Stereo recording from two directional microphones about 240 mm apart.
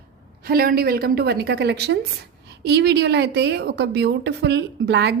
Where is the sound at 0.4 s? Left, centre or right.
Right.